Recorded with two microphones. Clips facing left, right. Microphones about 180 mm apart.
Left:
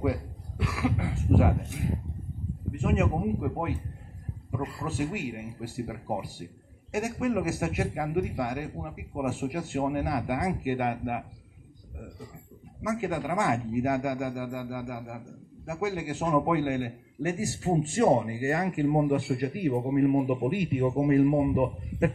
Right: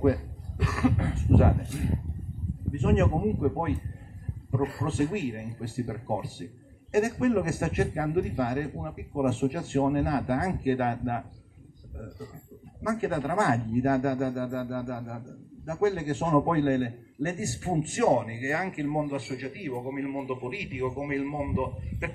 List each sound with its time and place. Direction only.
0.7 s speech: 5° left (ahead or behind)
2.8 s speech: 5° left (ahead or behind)
4.8 s speech: 5° left (ahead or behind)
12.8 s speech: 5° left (ahead or behind)
17.9 s a man's voice: 35° left (ahead or behind)